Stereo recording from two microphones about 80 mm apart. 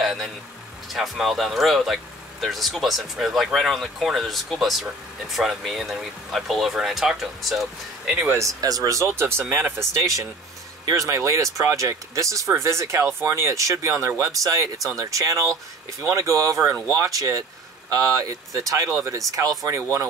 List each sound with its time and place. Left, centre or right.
0.0 s vehicle: centre
0.9 s speech: centre
8.3 s speech: right